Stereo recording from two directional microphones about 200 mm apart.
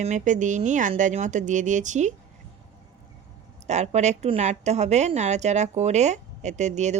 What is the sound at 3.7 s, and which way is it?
A woman's voice, 35° right (ahead or behind).